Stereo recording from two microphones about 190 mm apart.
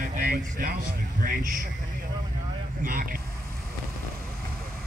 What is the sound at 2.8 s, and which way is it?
Speech, 50° right (ahead or behind).